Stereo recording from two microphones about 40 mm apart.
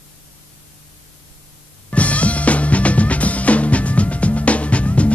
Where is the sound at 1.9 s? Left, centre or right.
Left.